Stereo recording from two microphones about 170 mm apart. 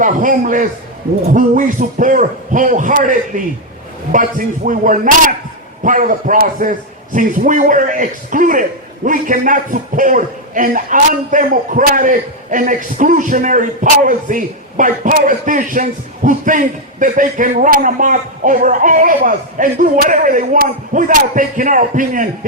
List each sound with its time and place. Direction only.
0.0 s a man's voice: 50° right (ahead or behind)